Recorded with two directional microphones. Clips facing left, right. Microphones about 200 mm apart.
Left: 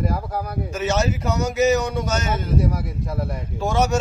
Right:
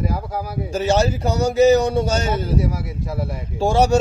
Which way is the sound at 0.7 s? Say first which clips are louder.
Right 4 dB; 30° right (ahead or behind).